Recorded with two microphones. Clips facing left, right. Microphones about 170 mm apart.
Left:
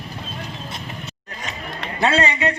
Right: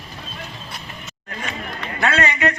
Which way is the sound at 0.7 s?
30° left (ahead or behind).